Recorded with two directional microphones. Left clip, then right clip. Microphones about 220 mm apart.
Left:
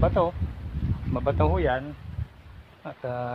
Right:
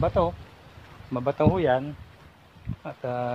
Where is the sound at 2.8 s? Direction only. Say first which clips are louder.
Right 2 dB; centre (ahead or behind).